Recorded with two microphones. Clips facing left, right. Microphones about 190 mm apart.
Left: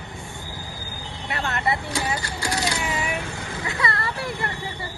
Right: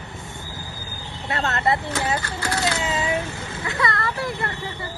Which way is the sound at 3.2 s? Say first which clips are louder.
Right 2 dB; 15° left (ahead or behind).